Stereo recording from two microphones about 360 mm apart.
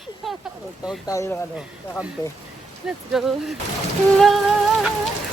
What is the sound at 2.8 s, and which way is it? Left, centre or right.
Speech, centre.